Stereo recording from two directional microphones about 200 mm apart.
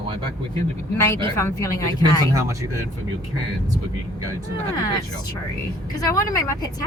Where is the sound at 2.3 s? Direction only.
15° right (ahead or behind).